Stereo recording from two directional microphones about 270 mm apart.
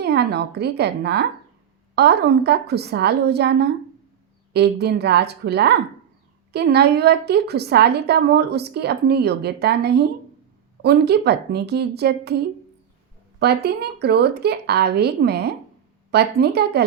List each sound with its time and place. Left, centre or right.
0.0 s a woman's voice: right
13.4 s a woman's voice: right